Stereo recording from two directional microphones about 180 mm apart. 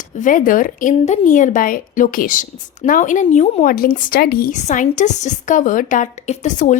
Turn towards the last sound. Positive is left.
turn(degrees=45)  # may be behind; listen again after turning